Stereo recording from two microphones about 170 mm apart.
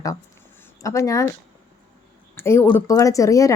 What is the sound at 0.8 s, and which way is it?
Speech, 20° left (ahead or behind).